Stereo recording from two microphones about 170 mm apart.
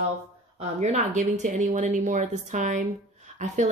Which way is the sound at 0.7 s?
45° right (ahead or behind).